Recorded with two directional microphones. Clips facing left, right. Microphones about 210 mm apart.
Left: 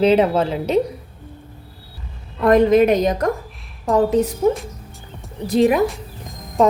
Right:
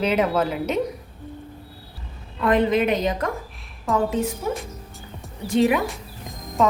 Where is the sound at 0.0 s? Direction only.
30° left (ahead or behind).